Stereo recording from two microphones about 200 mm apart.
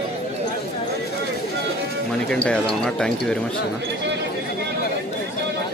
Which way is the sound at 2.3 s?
5° left (ahead or behind).